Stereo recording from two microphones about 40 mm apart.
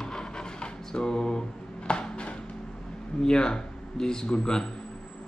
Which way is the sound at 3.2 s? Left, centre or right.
Centre.